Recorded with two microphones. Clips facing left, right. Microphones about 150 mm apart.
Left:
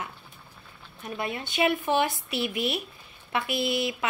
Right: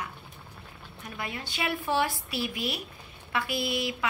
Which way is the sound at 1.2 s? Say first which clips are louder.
Left 7 dB; 25° left (ahead or behind).